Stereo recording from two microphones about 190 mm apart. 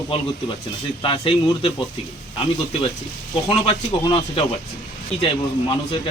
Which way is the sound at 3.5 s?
30° left (ahead or behind).